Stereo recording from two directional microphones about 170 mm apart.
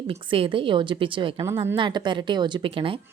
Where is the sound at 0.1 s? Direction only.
30° right (ahead or behind).